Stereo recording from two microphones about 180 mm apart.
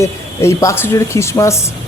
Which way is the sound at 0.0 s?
15° left (ahead or behind).